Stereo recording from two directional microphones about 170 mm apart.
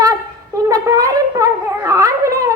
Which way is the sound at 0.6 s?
20° right (ahead or behind).